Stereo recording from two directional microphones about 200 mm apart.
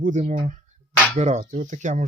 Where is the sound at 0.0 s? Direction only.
40° right (ahead or behind).